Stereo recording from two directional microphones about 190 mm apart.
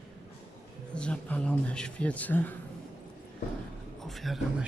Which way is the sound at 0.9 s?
5° left (ahead or behind).